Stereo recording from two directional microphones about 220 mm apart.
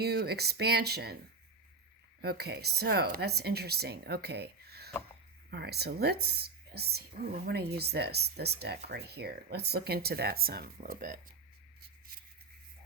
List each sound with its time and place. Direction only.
0.0 s speech: 45° right (ahead or behind)
2.2 s speech: 45° right (ahead or behind)